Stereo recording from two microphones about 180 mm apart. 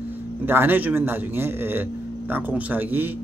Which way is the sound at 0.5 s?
10° right (ahead or behind).